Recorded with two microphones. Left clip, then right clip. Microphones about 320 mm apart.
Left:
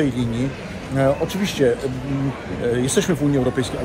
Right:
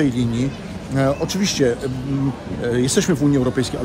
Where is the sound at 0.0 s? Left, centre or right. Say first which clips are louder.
Right 1 dB; centre.